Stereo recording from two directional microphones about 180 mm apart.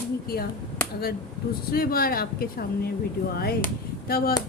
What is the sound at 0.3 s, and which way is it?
Speech, 55° left (ahead or behind).